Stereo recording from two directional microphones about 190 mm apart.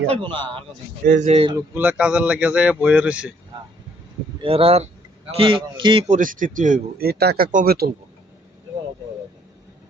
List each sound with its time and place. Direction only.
0.1 s a man's voice: 25° right (ahead or behind)
1.0 s speech: 40° right (ahead or behind)
1.5 s speech: 10° right (ahead or behind)
4.4 s a man's voice: 30° right (ahead or behind)
6.1 s speech: 45° right (ahead or behind)